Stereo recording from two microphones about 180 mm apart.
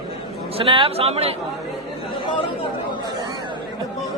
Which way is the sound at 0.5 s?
30° right (ahead or behind).